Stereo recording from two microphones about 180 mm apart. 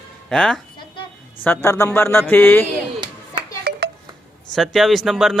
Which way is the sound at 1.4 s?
15° left (ahead or behind).